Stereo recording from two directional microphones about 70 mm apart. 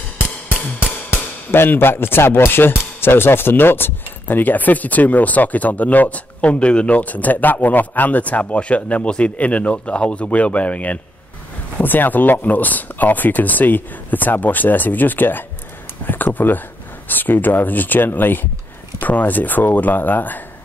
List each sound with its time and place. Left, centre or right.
1.5 s speech: left